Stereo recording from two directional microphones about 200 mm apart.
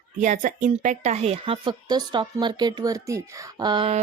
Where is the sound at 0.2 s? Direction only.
40° right (ahead or behind).